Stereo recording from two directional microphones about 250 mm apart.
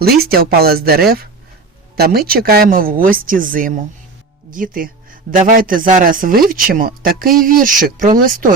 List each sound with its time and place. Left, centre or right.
0.0 s speech: right